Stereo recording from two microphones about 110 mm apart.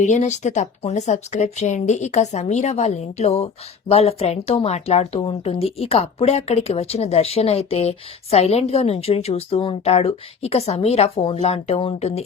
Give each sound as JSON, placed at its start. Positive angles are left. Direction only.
{"t": 0.0, "sound": "speech", "side_deg": 90}